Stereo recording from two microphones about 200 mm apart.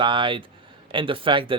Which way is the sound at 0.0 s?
25° right (ahead or behind).